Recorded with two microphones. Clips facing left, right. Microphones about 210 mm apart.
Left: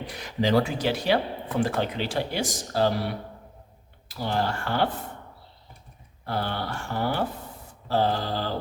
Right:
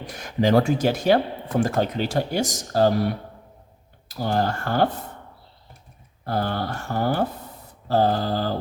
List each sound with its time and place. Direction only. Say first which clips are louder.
0.1 s speech: right 4 dB; 50° right (ahead or behind)
4.2 s speech: right 4 dB; 45° right (ahead or behind)
6.2 s speech: right 4 dB; 45° right (ahead or behind)